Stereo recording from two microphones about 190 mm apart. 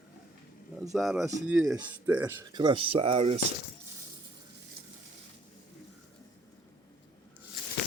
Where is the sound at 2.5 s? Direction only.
25° right (ahead or behind).